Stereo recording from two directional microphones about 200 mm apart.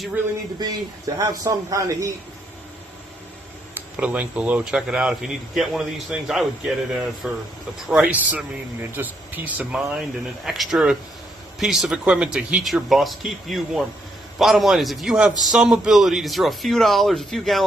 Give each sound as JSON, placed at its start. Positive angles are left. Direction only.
{"t": 0.6, "sound": "a man's voice", "side_deg": -20}
{"t": 3.8, "sound": "a man's voice", "side_deg": -5}